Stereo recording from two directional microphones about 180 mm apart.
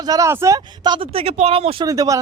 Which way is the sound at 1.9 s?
20° right (ahead or behind).